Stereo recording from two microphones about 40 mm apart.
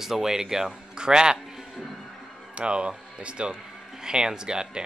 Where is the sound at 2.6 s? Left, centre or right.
Right.